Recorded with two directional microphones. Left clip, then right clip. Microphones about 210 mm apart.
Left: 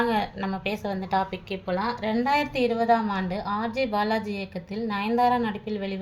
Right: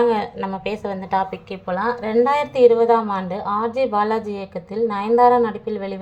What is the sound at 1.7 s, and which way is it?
A woman's voice, centre (ahead or behind).